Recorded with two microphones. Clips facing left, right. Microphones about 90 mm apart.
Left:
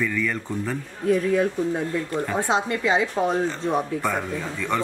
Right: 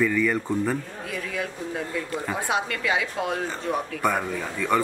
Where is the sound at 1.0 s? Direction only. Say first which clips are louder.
Left 13 dB; 35° left (ahead or behind).